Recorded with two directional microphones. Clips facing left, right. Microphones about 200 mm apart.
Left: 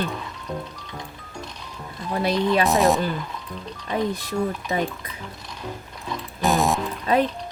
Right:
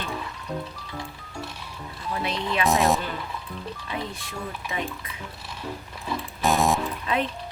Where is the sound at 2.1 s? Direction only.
35° left (ahead or behind).